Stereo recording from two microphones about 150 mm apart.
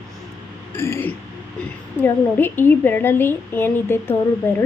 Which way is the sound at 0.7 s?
15° left (ahead or behind).